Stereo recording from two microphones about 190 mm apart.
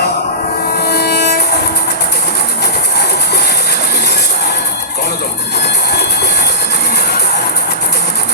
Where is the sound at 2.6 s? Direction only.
60° left (ahead or behind).